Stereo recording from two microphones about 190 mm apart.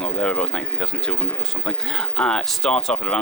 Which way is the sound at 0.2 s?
5° left (ahead or behind).